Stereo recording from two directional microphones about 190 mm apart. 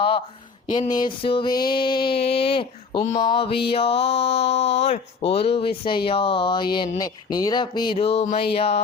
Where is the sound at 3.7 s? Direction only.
30° left (ahead or behind).